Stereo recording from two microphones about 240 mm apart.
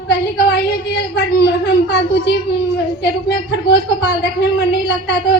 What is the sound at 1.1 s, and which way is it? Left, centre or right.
A woman's voice, left.